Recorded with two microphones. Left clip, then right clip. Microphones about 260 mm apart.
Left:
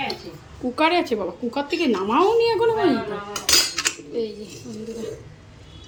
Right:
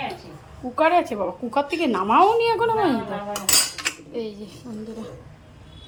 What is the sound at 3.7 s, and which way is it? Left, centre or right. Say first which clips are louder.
Cutlery: left 3 dB; centre.